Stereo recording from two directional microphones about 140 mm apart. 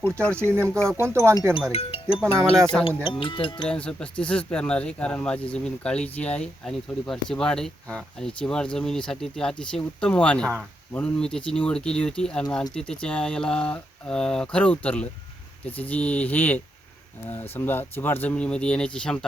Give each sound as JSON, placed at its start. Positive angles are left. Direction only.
{"t": 0.0, "sound": "speech", "side_deg": 10}
{"t": 0.5, "sound": "speech", "side_deg": -20}
{"t": 1.7, "sound": "speech", "side_deg": 45}
{"t": 3.7, "sound": "speech", "side_deg": 10}